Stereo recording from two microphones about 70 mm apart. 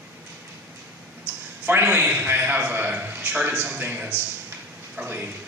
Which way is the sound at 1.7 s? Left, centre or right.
Right.